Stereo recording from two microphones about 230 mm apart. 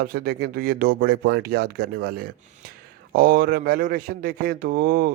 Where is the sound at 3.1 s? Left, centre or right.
Right.